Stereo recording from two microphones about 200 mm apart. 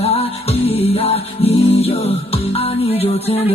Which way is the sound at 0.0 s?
30° left (ahead or behind).